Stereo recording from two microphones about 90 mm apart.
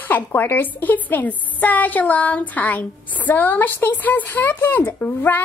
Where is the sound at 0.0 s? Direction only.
20° left (ahead or behind).